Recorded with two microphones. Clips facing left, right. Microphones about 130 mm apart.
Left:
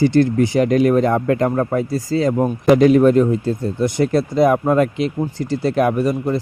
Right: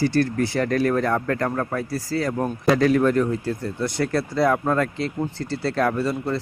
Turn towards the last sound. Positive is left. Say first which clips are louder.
# left 5 dB
turn(degrees=15)  # may be behind; listen again after turning